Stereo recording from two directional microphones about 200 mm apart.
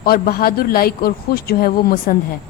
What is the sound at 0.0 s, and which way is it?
A man's voice, 50° left (ahead or behind).